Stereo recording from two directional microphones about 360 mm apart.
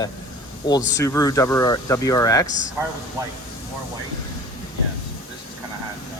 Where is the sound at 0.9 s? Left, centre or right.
Centre.